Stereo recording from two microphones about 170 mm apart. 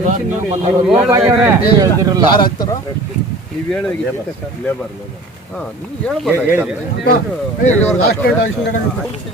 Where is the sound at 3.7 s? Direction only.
10° left (ahead or behind).